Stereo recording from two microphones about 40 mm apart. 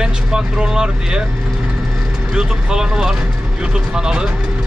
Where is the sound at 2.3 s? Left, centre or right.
Centre.